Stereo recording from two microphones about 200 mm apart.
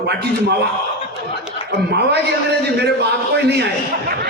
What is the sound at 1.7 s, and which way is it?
Speech, 55° right (ahead or behind).